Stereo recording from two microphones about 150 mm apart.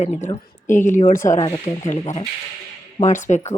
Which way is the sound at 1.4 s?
25° left (ahead or behind).